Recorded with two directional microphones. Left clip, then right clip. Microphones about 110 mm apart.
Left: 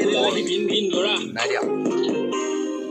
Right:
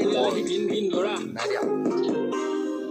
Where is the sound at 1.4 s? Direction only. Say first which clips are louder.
Left 3 dB; 25° left (ahead or behind).